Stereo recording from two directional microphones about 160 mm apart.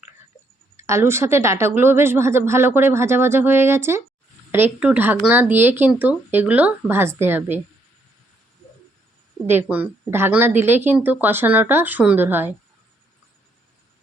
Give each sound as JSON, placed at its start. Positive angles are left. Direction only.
{"t": 0.8, "sound": "a woman's voice", "side_deg": -15}
{"t": 9.5, "sound": "a woman's voice", "side_deg": -10}